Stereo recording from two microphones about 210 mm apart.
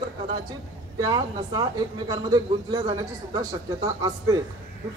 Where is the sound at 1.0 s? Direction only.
20° right (ahead or behind).